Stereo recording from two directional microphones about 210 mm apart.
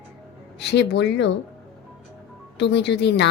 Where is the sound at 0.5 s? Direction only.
55° left (ahead or behind).